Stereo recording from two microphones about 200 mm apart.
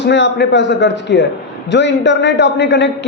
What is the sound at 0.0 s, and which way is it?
Speech, 60° left (ahead or behind).